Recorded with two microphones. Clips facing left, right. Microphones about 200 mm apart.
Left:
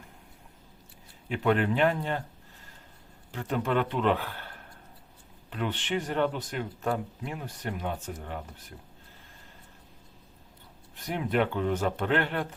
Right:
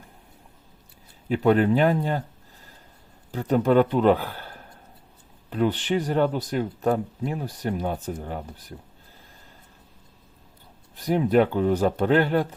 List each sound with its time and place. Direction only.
1.3 s speech: 40° right (ahead or behind)
3.3 s speech: 40° right (ahead or behind)
10.9 s speech: 35° right (ahead or behind)